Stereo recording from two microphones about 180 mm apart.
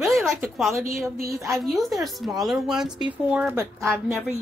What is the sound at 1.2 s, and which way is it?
Speech, 15° right (ahead or behind).